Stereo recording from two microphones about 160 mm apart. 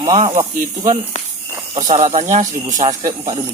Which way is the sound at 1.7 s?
45° right (ahead or behind).